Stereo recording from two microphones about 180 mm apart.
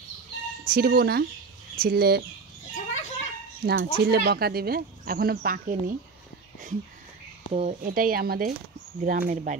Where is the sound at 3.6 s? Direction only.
60° right (ahead or behind).